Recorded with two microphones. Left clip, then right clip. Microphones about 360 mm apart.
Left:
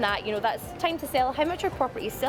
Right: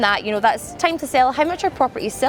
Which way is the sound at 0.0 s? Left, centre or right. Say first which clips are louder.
Right 9 dB; right.